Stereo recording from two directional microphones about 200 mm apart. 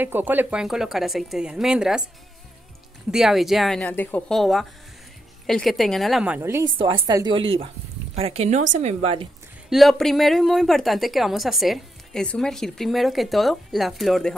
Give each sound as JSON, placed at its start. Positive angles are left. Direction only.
{"t": 0.0, "sound": "a woman's voice", "side_deg": -10}
{"t": 3.1, "sound": "a woman's voice", "side_deg": 0}
{"t": 9.7, "sound": "a woman's voice", "side_deg": 0}